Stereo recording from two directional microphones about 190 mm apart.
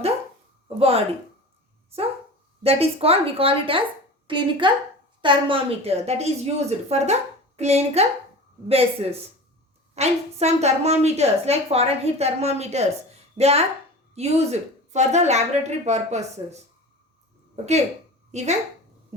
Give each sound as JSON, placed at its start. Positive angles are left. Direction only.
{"t": 0.8, "sound": "a woman's voice", "side_deg": -30}
{"t": 2.6, "sound": "a woman's voice", "side_deg": -30}
{"t": 17.6, "sound": "a woman's voice", "side_deg": -35}